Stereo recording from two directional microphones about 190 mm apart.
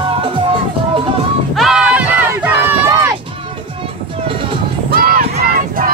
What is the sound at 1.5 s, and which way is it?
Crowd, centre (ahead or behind).